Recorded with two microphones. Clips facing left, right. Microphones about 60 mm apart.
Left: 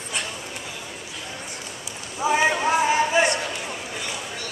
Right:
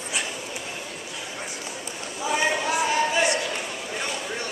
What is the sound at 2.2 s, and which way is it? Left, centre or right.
Clip-clop, left.